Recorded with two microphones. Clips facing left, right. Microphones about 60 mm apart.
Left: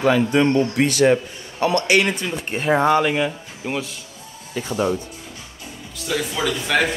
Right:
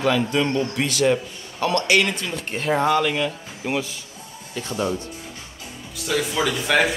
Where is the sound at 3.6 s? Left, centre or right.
Centre.